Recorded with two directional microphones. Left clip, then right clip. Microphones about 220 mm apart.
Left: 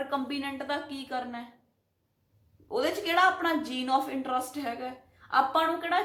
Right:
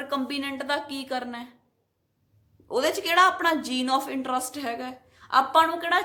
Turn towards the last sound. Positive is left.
turn(degrees=-45)  # may be behind; listen again after turning